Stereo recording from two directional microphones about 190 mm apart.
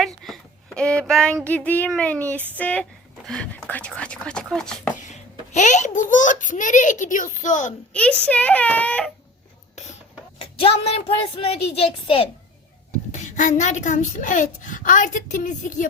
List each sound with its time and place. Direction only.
0.0 s child singing: centre (ahead or behind)
2.6 s speech: 5° left (ahead or behind)
4.9 s a child's voice: 40° left (ahead or behind)
7.9 s speech: 5° left (ahead or behind)
10.3 s a child's voice: 30° left (ahead or behind)
13.1 s a child's voice: 40° left (ahead or behind)